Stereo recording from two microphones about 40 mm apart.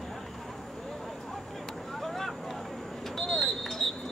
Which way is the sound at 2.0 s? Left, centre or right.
Centre.